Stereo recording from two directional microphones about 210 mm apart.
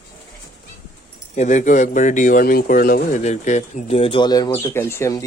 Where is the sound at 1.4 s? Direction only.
35° left (ahead or behind).